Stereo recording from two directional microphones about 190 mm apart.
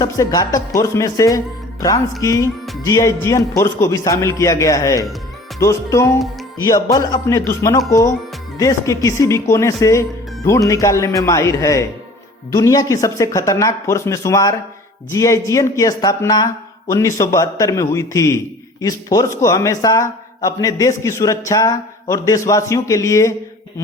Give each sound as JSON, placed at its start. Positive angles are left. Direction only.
{"t": 0.0, "sound": "speech", "side_deg": 20}